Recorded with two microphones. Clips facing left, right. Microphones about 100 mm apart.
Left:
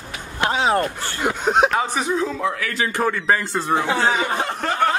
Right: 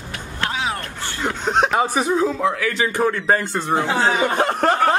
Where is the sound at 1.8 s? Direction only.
10° right (ahead or behind).